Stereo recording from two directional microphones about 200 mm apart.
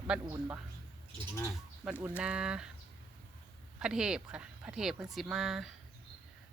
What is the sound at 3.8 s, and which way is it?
Speech, 5° right (ahead or behind).